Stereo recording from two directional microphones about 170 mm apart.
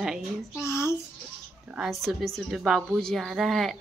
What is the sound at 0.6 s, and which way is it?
Child singing, 15° left (ahead or behind).